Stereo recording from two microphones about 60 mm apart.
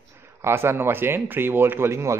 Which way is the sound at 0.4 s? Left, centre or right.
Right.